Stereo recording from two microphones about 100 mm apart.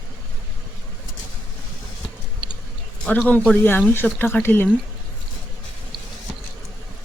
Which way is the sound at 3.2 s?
15° left (ahead or behind).